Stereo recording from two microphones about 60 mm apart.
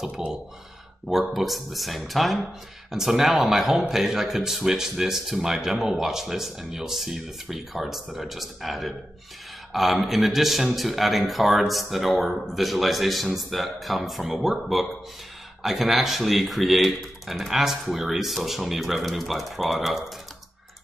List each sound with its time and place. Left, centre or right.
0.0 s a man's voice: centre